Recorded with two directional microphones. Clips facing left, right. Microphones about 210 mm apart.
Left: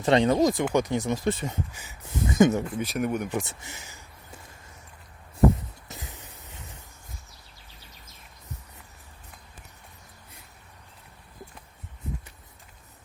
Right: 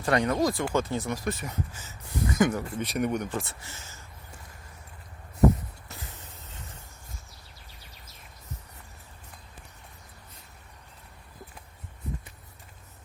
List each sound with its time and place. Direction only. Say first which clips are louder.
0.0 s speech: left 4 dB; 25° left (ahead or behind)
1.7 s speech: left 1 dB; 15° left (ahead or behind)
2.7 s speech: left 1 dB; centre (ahead or behind)
5.9 s spray: left 2 dB; 20° left (ahead or behind)